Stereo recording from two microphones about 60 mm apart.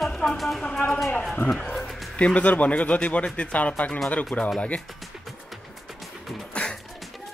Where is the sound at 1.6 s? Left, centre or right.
Centre.